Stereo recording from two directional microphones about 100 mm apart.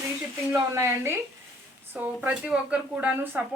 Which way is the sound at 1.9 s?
15° right (ahead or behind).